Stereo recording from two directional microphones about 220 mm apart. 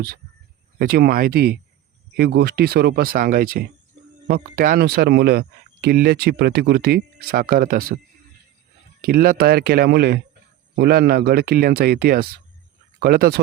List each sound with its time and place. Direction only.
0.8 s speech: 45° right (ahead or behind)
9.0 s speech: 45° right (ahead or behind)